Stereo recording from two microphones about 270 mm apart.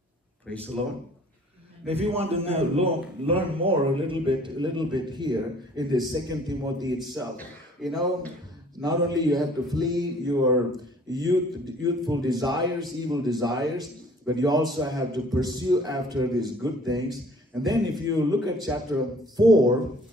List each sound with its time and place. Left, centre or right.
1.9 s a man's voice: right
7.3 s speech: centre
8.8 s a man's voice: centre